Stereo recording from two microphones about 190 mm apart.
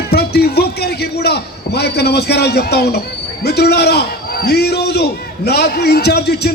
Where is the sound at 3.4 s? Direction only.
60° left (ahead or behind).